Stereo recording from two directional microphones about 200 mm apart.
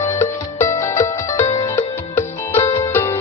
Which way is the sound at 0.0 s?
15° left (ahead or behind).